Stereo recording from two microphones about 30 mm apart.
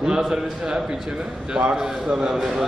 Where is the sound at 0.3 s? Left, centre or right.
Right.